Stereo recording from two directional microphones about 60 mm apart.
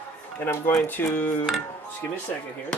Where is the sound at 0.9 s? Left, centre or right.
Left.